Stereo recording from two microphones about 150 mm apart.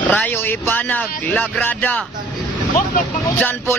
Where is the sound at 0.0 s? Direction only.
10° left (ahead or behind).